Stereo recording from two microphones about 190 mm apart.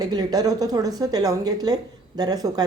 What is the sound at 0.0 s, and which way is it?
A woman's voice, 20° right (ahead or behind).